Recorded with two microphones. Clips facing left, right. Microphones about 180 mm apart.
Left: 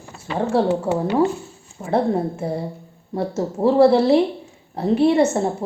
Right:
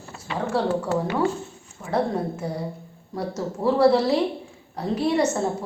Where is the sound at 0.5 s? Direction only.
30° left (ahead or behind).